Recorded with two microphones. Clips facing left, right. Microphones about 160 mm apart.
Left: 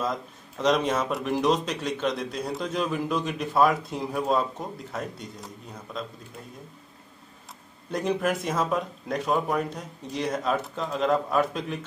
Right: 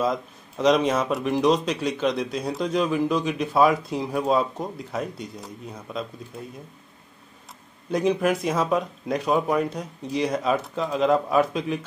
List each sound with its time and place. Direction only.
0.6 s a man's voice: centre (ahead or behind)
7.9 s a man's voice: centre (ahead or behind)